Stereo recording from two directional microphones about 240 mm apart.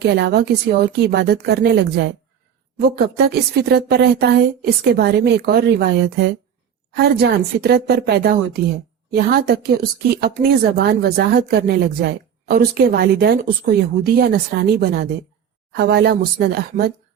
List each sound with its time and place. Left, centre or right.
0.0 s a woman's voice: right